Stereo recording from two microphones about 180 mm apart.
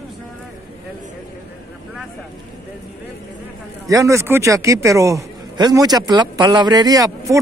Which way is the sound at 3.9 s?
15° right (ahead or behind).